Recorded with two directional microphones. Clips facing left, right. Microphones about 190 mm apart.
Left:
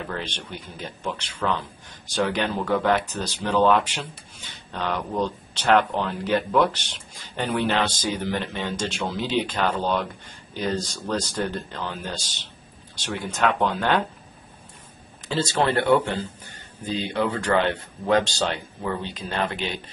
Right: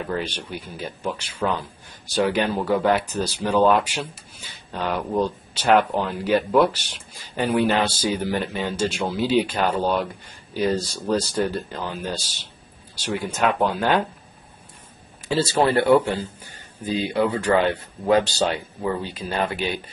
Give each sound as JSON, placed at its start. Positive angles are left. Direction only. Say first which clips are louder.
{"t": 0.2, "sound": "a man's voice", "louder": "right 4 dB", "side_deg": -10}
{"t": 15.2, "sound": "a man's voice", "louder": "right 3 dB", "side_deg": -10}